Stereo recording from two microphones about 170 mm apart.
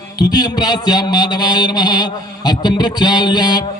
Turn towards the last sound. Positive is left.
turn(degrees=25)  # may be behind; listen again after turning